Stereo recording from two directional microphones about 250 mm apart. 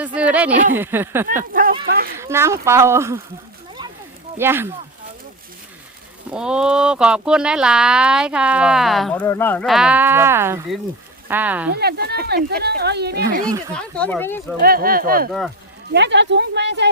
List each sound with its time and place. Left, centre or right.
0.0 s speech: centre
1.6 s a sound: right
1.9 s speech: right
2.1 s speech: centre
4.4 s speech: centre
6.3 s speech: centre
11.7 s speech: right
13.7 s speech: centre
14.6 s speech: right